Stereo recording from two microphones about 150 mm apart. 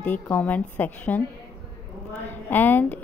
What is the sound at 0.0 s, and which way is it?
A woman's voice, 10° left (ahead or behind).